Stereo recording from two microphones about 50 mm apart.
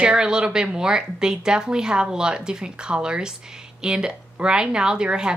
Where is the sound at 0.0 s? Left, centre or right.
Centre.